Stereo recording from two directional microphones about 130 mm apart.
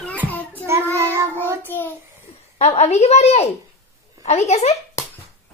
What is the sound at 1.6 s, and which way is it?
Child singing, 15° left (ahead or behind).